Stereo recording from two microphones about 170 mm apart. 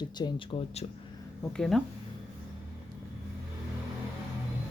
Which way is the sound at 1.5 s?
5° left (ahead or behind).